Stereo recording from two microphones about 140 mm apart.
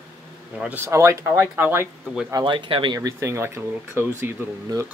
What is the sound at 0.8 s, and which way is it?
Speech, 20° right (ahead or behind).